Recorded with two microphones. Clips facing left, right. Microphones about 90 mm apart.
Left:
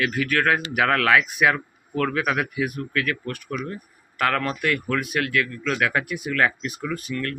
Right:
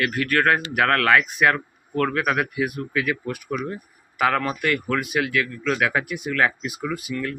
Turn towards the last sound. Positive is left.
turn(degrees=-5)  # may be behind; listen again after turning